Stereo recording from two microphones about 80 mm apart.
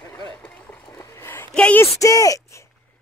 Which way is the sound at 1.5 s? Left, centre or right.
Centre.